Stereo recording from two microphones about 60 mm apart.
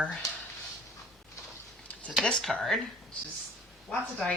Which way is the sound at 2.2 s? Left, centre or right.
Centre.